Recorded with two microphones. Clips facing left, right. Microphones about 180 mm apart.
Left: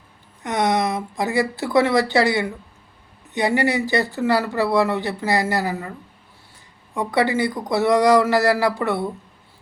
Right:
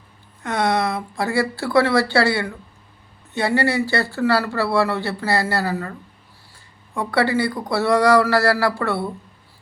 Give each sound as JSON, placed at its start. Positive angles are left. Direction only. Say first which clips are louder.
{"t": 0.4, "sound": "speech", "louder": "even", "side_deg": 20}
{"t": 6.9, "sound": "speech", "louder": "even", "side_deg": 20}